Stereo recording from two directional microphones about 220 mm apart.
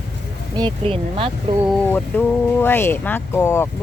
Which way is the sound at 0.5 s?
20° right (ahead or behind).